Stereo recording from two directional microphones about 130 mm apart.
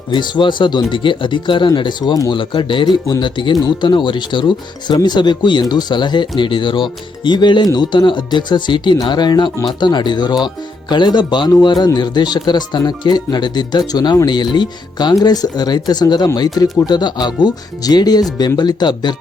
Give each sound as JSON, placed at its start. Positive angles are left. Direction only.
{"t": 0.1, "sound": "speech", "side_deg": 35}